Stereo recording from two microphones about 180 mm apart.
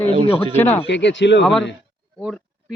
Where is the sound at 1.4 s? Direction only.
5° left (ahead or behind).